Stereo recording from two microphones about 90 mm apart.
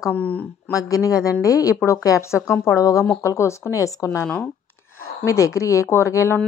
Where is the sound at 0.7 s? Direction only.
40° left (ahead or behind).